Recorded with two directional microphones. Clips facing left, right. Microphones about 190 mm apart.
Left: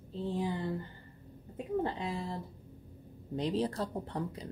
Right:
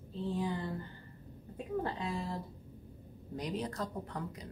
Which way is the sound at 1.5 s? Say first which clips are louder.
Left 3 dB; 25° left (ahead or behind).